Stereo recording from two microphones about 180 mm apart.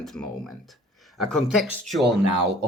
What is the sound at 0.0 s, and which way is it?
Speech, centre (ahead or behind).